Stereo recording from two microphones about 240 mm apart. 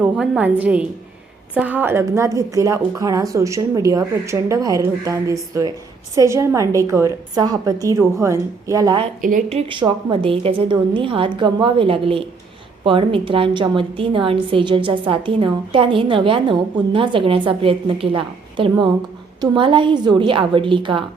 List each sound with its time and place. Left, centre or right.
0.0 s a woman's voice: centre
9.2 s a woman's voice: right